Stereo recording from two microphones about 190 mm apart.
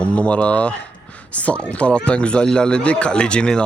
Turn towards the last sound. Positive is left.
turn(degrees=5)  # may be behind; listen again after turning